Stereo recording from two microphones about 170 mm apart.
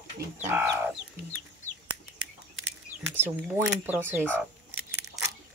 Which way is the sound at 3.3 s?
10° right (ahead or behind).